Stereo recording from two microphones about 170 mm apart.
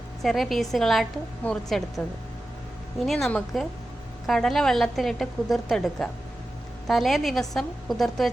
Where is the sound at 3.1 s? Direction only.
Centre (ahead or behind).